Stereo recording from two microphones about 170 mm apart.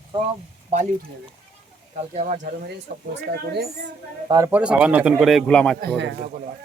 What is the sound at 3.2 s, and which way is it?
Speech, 75° right (ahead or behind).